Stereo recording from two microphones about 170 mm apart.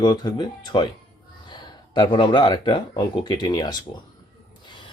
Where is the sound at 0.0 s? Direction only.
25° left (ahead or behind).